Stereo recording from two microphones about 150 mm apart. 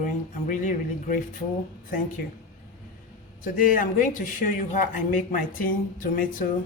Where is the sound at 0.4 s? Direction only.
55° left (ahead or behind).